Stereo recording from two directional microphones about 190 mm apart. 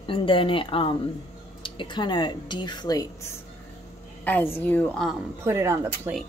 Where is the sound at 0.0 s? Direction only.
25° left (ahead or behind).